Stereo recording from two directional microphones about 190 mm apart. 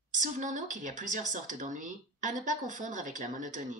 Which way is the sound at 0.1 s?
40° right (ahead or behind).